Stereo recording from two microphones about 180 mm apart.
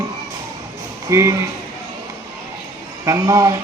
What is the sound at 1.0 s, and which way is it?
Speech, 15° right (ahead or behind).